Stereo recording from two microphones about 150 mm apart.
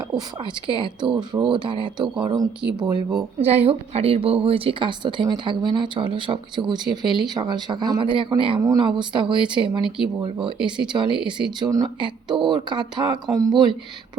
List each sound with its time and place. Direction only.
0.1 s a woman's voice: 30° right (ahead or behind)
3.3 s a woman's voice: 45° right (ahead or behind)